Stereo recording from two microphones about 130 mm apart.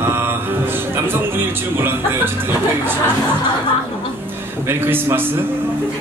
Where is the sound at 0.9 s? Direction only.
15° right (ahead or behind).